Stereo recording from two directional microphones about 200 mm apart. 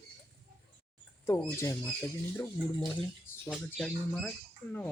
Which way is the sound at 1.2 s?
15° left (ahead or behind).